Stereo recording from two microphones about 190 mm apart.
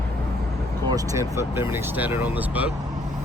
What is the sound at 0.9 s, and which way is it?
Speech, 20° right (ahead or behind).